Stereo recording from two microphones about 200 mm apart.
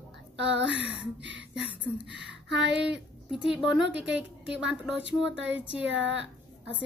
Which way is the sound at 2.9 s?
5° right (ahead or behind).